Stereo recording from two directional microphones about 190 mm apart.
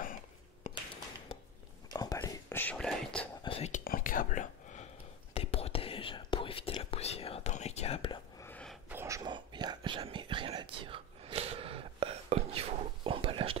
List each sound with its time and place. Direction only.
0.7 s a sound: 40° left (ahead or behind)
1.9 s whispering: 20° left (ahead or behind); by 3.3 s 5° left (ahead or behind)
3.4 s whispering: 30° left (ahead or behind)
3.8 s whispering: 45° left (ahead or behind)
5.3 s whispering: 30° left (ahead or behind)
8.4 s a sound: 10° left (ahead or behind)
8.8 s whispering: 15° right (ahead or behind); by 13.6 s 30° right (ahead or behind)